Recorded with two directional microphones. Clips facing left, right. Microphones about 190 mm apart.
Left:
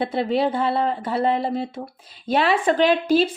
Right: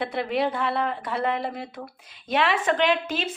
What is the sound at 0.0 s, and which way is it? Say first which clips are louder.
Speech: left 4 dB; 30° left (ahead or behind).